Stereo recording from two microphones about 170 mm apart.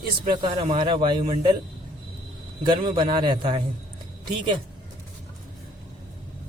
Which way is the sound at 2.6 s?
25° right (ahead or behind).